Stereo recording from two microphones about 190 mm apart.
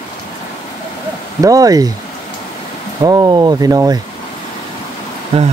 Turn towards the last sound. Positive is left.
turn(degrees=-30)  # may be behind; listen again after turning